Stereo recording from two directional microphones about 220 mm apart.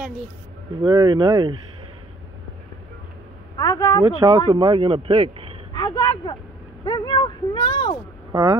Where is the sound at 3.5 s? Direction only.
20° left (ahead or behind).